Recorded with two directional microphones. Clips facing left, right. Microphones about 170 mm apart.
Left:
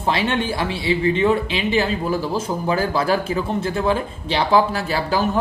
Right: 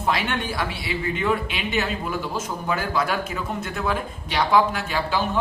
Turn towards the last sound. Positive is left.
turn(degrees=40)  # may be behind; listen again after turning